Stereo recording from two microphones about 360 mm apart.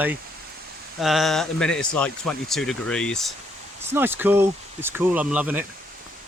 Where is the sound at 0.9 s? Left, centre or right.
Centre.